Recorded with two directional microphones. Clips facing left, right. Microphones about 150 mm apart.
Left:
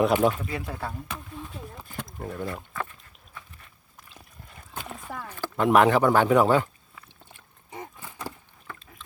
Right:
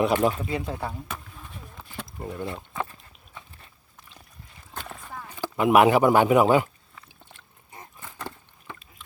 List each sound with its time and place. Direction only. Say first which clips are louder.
0.0 s speech: left 1 dB; centre (ahead or behind)
0.4 s speech: right 3 dB; 20° right (ahead or behind)
0.9 s a sound: even; centre (ahead or behind)
2.1 s speech: right 1 dB; centre (ahead or behind)
2.7 s pig: right 4 dB; 20° right (ahead or behind)
3.3 s walk: right 1 dB; 25° right (ahead or behind)
5.4 s speech: right 1 dB; 10° right (ahead or behind)
8.6 s dog: even; 10° right (ahead or behind)